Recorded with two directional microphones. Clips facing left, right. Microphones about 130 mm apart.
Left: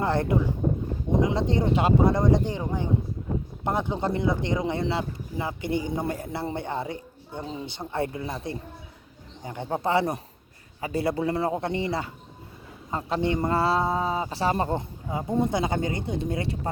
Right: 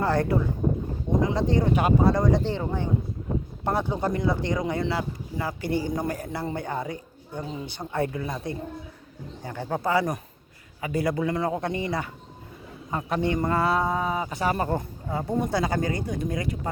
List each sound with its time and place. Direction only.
0.0 s speech: 20° left (ahead or behind)